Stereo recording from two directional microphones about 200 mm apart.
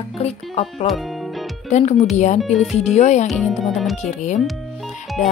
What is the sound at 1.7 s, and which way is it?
Speech, 35° left (ahead or behind).